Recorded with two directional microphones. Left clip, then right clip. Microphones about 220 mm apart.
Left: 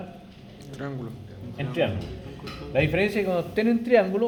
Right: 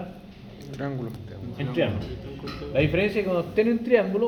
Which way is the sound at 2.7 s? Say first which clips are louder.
Even; 35° left (ahead or behind).